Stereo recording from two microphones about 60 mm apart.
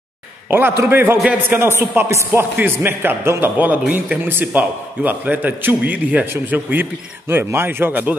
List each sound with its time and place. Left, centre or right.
0.5 s a man's voice: right
2.5 s a man's voice: right